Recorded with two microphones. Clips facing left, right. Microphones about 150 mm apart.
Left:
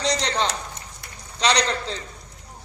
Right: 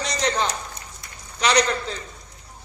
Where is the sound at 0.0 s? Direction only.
30° left (ahead or behind).